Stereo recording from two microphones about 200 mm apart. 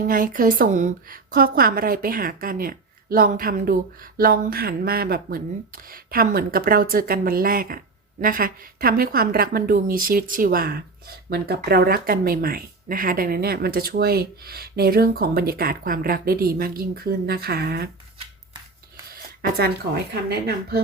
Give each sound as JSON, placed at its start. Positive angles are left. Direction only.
{"t": 0.1, "sound": "a woman's voice", "side_deg": -45}
{"t": 19.4, "sound": "speech", "side_deg": -50}